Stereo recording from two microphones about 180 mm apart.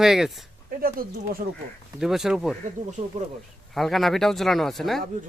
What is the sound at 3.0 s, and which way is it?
Speech, 45° right (ahead or behind).